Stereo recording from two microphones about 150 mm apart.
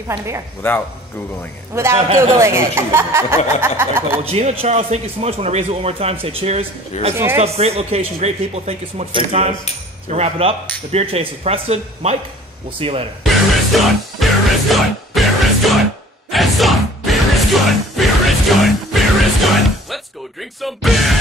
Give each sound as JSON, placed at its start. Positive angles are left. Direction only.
{"t": 0.6, "sound": "speech", "side_deg": 10}
{"t": 1.7, "sound": "speech", "side_deg": -15}
{"t": 4.2, "sound": "speech", "side_deg": -45}
{"t": 13.2, "sound": "music", "side_deg": 0}